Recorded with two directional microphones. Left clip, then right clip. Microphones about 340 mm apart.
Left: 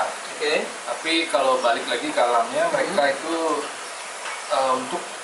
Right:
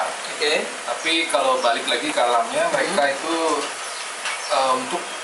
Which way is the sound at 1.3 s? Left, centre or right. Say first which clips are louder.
Even; left.